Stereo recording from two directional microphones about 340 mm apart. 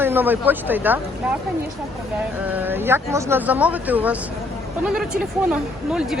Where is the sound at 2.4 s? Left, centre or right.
Centre.